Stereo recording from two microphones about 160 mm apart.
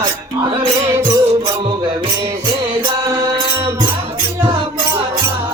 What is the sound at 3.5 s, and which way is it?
Music, 15° right (ahead or behind).